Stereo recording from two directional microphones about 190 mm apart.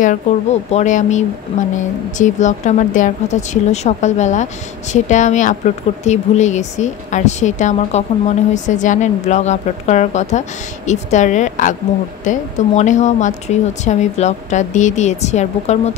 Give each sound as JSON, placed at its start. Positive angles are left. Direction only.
{"t": 0.0, "sound": "a woman's voice", "side_deg": 40}